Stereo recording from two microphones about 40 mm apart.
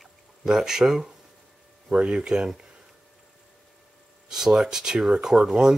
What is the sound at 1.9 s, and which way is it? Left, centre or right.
Speech, right.